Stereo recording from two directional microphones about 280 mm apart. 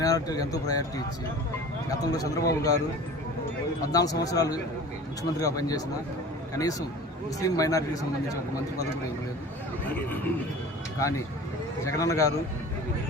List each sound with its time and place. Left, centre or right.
0.0 s speech: centre
3.9 s speech: centre
11.9 s speech: centre